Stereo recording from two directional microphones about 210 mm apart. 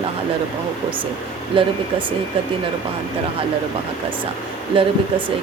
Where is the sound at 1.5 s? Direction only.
25° right (ahead or behind).